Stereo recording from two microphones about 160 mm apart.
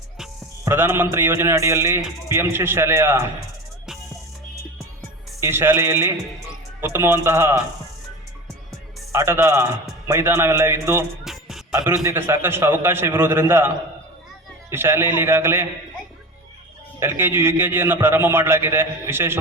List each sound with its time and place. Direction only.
0.6 s a man's voice: 15° right (ahead or behind)
5.4 s a man's voice: 15° right (ahead or behind)
9.1 s a man's voice: 15° right (ahead or behind)
11.2 s music: centre (ahead or behind)
11.9 s a man's voice: 15° right (ahead or behind)
14.7 s a man's voice: 15° right (ahead or behind)
17.0 s a man's voice: 15° right (ahead or behind)